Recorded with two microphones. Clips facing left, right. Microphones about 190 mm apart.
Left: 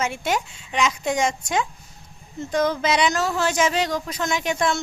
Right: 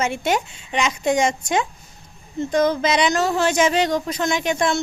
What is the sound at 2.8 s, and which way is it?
Speech, 5° left (ahead or behind).